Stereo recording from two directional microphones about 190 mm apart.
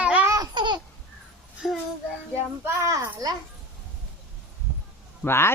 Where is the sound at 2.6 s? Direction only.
15° right (ahead or behind).